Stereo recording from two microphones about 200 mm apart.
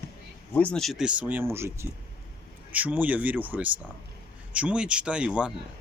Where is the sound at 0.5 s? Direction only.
5° left (ahead or behind).